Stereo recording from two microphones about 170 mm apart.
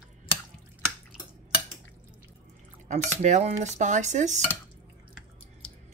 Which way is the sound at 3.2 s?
40° right (ahead or behind).